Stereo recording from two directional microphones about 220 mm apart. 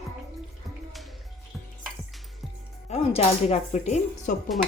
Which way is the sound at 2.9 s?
30° left (ahead or behind).